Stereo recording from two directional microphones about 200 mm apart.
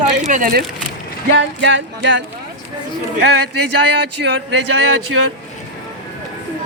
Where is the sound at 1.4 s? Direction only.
65° right (ahead or behind).